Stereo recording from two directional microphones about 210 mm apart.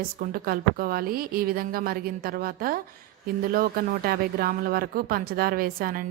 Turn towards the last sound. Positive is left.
turn(degrees=-45)  # may be behind; listen again after turning